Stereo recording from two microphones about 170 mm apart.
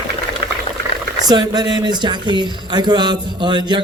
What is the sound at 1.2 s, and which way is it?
Speech, 25° right (ahead or behind).